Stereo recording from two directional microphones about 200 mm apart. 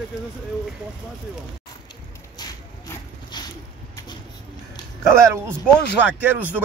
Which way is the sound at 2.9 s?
20° left (ahead or behind).